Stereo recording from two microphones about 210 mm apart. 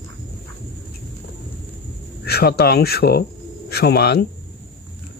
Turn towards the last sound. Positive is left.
turn(degrees=50)  # may be behind; listen again after turning